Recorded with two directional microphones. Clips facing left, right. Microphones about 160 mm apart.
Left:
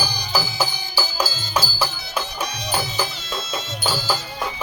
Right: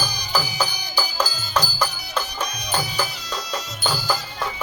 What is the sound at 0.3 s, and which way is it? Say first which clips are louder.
Music: even; 10° left (ahead or behind).